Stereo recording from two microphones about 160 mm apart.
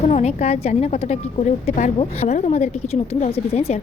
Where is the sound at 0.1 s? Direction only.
40° left (ahead or behind).